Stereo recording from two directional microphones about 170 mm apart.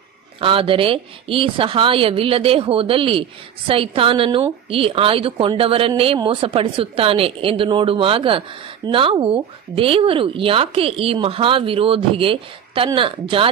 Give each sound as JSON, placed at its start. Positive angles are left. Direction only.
{"t": 0.4, "sound": "a woman's voice", "side_deg": -30}